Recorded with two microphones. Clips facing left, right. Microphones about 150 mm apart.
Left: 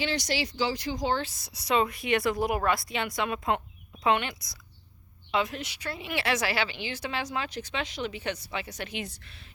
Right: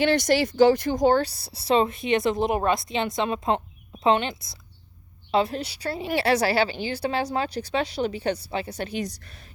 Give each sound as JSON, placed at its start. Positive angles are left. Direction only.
{"t": 0.0, "sound": "a woman's voice", "side_deg": -55}